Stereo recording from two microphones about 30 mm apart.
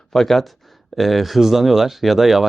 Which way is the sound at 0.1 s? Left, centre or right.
Centre.